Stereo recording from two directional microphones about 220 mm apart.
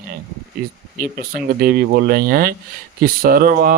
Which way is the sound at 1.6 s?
45° right (ahead or behind).